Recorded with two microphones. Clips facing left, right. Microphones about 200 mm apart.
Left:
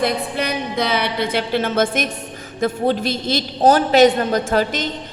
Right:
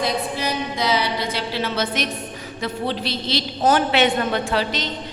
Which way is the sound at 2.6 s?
45° left (ahead or behind).